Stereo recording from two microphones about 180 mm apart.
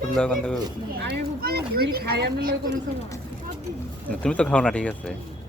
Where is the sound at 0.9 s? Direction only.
60° right (ahead or behind).